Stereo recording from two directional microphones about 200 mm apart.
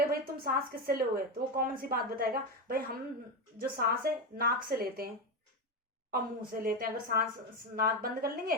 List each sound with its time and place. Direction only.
0.0 s a woman's voice: 50° right (ahead or behind)
6.1 s a woman's voice: 45° right (ahead or behind)